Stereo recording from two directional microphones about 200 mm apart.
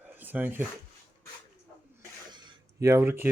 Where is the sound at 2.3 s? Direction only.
20° right (ahead or behind).